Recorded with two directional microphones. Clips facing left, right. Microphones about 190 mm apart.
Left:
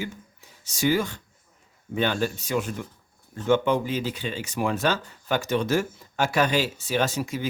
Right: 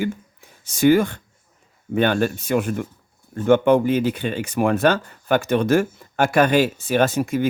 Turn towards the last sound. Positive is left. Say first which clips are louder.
# right 7 dB
turn(degrees=-55)  # may be behind; listen again after turning